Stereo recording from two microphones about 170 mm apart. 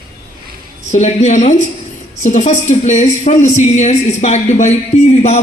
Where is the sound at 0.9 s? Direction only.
45° left (ahead or behind).